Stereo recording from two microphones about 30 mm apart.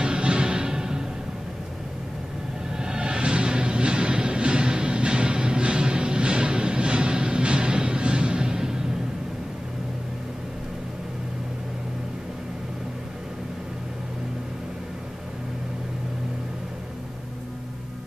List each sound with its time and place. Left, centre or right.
0.0 s music: right
2.8 s music: right